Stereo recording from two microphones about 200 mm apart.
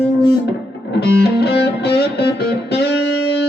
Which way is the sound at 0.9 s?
55° left (ahead or behind).